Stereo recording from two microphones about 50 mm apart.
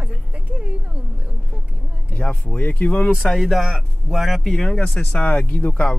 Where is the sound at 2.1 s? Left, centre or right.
Left.